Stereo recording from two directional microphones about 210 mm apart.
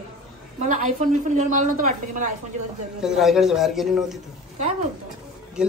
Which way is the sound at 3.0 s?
Centre (ahead or behind).